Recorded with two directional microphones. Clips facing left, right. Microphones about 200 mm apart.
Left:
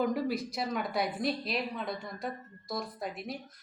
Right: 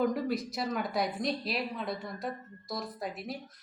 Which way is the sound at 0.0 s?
Centre (ahead or behind).